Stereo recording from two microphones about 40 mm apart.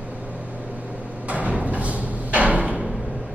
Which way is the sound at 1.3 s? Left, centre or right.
Right.